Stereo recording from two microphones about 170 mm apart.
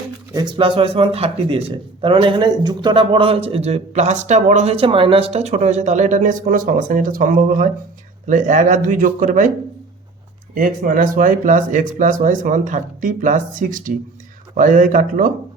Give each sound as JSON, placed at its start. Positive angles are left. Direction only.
{"t": 0.3, "sound": "speech", "side_deg": -30}
{"t": 10.5, "sound": "speech", "side_deg": -55}